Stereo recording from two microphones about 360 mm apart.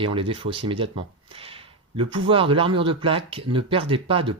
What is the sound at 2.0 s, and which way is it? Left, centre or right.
Speech, centre.